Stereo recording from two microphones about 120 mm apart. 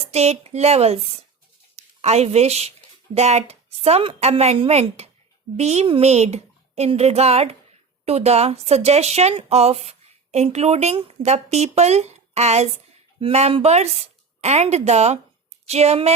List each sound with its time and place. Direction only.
0.0 s a woman's voice: 60° right (ahead or behind)